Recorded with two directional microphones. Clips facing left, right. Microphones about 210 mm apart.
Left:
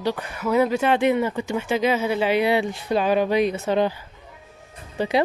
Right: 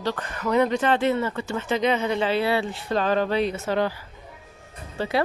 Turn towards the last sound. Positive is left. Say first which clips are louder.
# left 3 dB
turn(degrees=15)  # may be behind; listen again after turning